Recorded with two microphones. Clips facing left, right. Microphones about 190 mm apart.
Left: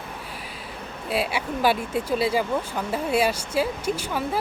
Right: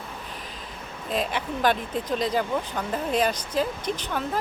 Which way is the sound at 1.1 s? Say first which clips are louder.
Left 2 dB; 10° left (ahead or behind).